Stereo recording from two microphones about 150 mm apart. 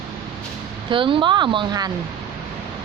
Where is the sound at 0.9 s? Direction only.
35° right (ahead or behind).